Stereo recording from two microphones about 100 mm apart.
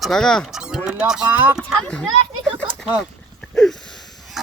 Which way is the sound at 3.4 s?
5° left (ahead or behind).